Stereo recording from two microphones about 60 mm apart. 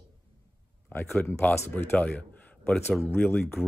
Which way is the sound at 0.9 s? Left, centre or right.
Left.